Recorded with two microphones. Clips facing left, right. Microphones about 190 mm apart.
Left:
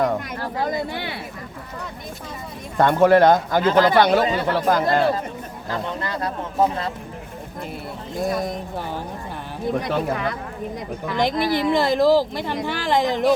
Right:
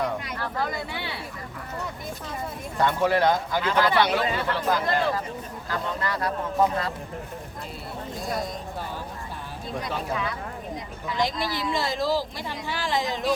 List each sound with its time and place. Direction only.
0.0 s speech: 40° left (ahead or behind)
2.7 s speech: 50° left (ahead or behind)
5.6 s speech: 25° left (ahead or behind)
9.7 s speech: 55° left (ahead or behind)